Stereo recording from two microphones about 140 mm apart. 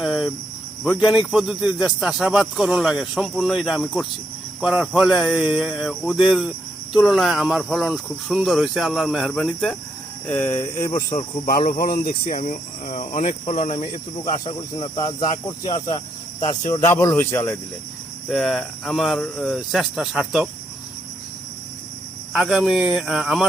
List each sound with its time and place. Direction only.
0.0 s speech: centre (ahead or behind)
10.2 s a sound: 15° left (ahead or behind)
11.1 s speech: 55° left (ahead or behind)
11.4 s speech: 90° left; by 14.0 s 40° left (ahead or behind)
14.3 s speech: 30° left (ahead or behind)
18.3 s speech: centre (ahead or behind)
22.3 s speech: 5° right (ahead or behind)